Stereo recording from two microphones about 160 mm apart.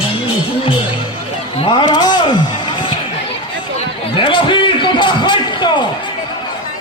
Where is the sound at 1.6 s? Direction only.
30° left (ahead or behind).